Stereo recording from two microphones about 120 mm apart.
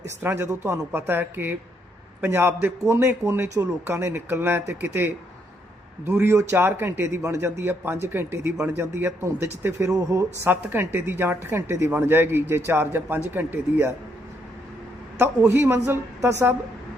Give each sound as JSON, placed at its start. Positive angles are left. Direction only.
{"t": 0.2, "sound": "a woman's voice", "side_deg": -20}
{"t": 15.2, "sound": "speech", "side_deg": -20}